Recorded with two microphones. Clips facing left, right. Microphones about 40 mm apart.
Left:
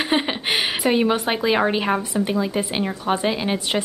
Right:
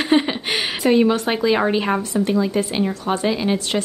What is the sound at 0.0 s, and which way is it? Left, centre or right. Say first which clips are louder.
A woman's voice: right 3 dB; centre.